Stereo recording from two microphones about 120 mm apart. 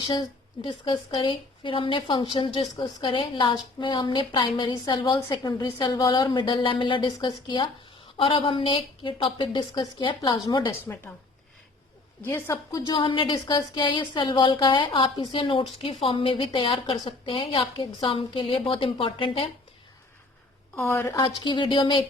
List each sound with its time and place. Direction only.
0.6 s a woman's voice: 40° left (ahead or behind)
10.7 s speech: 25° left (ahead or behind)
12.7 s a woman's voice: 35° left (ahead or behind)
20.7 s speech: 20° left (ahead or behind)
21.4 s a woman's voice: 45° left (ahead or behind)